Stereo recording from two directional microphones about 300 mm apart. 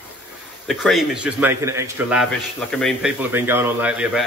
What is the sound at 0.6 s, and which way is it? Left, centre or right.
A man's voice, centre.